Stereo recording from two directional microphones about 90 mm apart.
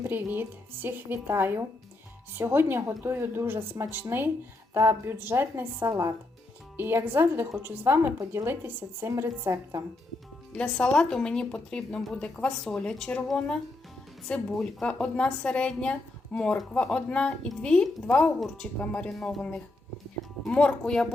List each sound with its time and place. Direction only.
0.0 s a woman's voice: 25° right (ahead or behind)
10.5 s a woman's voice: 10° left (ahead or behind)